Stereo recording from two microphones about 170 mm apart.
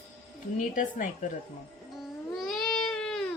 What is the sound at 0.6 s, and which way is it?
Speech, 50° left (ahead or behind).